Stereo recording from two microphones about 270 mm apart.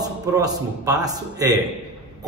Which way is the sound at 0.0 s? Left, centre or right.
Centre.